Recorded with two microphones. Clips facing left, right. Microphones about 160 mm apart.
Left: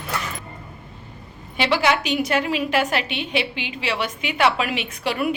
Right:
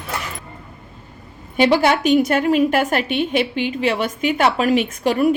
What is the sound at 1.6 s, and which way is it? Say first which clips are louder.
A woman's voice: right 5 dB; 45° right (ahead or behind).